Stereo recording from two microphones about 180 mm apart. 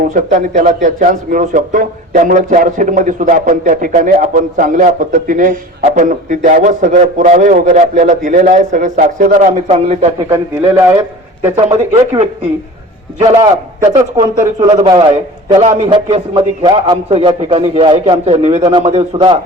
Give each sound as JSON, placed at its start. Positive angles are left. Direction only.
{"t": 0.1, "sound": "a man's voice", "side_deg": -45}
{"t": 10.2, "sound": "a man's voice", "side_deg": -15}
{"t": 11.7, "sound": "a man's voice", "side_deg": -35}
{"t": 14.6, "sound": "a man's voice", "side_deg": -25}
{"t": 18.7, "sound": "a man's voice", "side_deg": -25}